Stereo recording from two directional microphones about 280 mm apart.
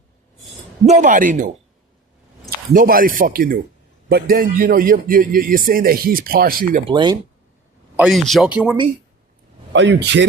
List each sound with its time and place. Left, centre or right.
0.9 s speech: right
2.7 s a man's voice: right
6.8 s speech: centre
7.9 s speech: centre
9.7 s a man's voice: right